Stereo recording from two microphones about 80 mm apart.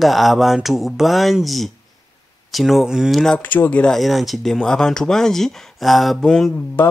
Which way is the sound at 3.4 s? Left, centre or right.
Left.